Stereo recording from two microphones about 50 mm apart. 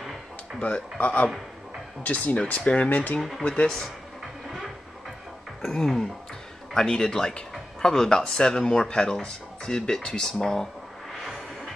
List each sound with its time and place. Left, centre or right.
0.6 s speech: left
3.2 s speech: centre
5.6 s speech: centre